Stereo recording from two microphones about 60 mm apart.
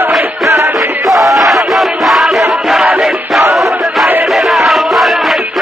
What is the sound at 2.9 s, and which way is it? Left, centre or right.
Battle cry, centre.